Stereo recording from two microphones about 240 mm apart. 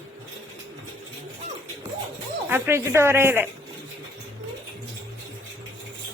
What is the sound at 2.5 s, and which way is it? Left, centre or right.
Speech, centre.